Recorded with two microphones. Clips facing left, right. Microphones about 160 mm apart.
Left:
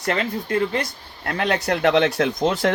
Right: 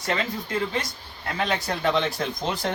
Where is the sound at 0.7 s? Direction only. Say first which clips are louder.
Left 4 dB; 60° left (ahead or behind).